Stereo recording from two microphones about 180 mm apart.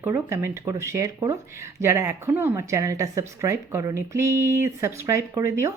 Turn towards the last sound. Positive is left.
turn(degrees=-15)  # may be behind; listen again after turning